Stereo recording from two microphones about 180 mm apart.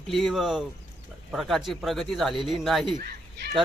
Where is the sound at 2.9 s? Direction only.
60° right (ahead or behind).